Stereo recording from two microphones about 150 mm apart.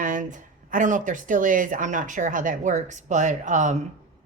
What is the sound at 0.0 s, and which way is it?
A woman's voice, 60° right (ahead or behind).